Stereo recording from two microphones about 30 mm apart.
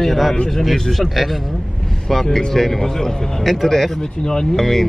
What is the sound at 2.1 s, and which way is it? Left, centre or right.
Speech, centre.